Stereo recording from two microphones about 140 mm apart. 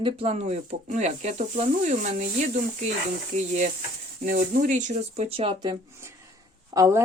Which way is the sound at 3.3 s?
55° right (ahead or behind).